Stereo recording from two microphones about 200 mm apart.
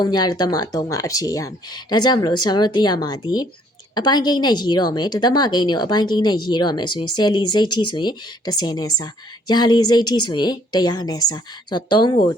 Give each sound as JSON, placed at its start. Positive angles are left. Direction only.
{"t": 0.0, "sound": "a woman's voice", "side_deg": 20}